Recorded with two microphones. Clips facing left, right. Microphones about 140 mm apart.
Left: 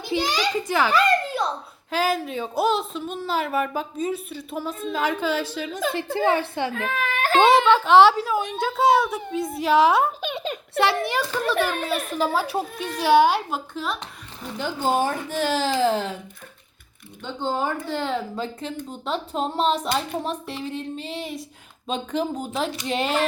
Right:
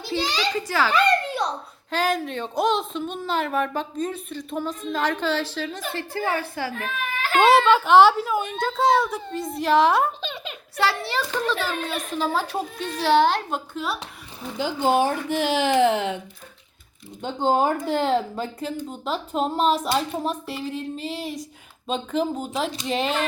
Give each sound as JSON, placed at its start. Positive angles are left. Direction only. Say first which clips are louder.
{"t": 0.0, "sound": "a child's voice", "louder": "left 2 dB", "side_deg": 15}
{"t": 0.9, "sound": "a sound", "louder": "even", "side_deg": 0}
{"t": 1.9, "sound": "a woman's voice", "louder": "even", "side_deg": 5}
{"t": 7.7, "sound": "a woman's voice", "louder": "even", "side_deg": 0}
{"t": 10.8, "sound": "a woman's voice", "louder": "left 2 dB", "side_deg": 20}
{"t": 13.7, "sound": "a woman's voice", "louder": "even", "side_deg": -5}
{"t": 15.5, "sound": "speech", "louder": "right 4 dB", "side_deg": -60}
{"t": 15.8, "sound": "speech", "louder": "right 1 dB", "side_deg": -20}
{"t": 17.2, "sound": "speech", "louder": "right 5 dB", "side_deg": -45}
{"t": 18.9, "sound": "a woman's voice", "louder": "even", "side_deg": 0}